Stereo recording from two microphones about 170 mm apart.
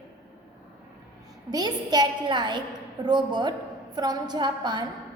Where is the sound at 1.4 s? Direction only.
25° right (ahead or behind).